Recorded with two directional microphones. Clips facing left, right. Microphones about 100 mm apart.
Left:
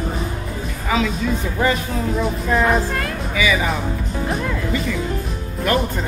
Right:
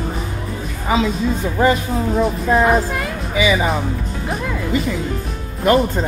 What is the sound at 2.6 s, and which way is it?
Speech, 5° right (ahead or behind).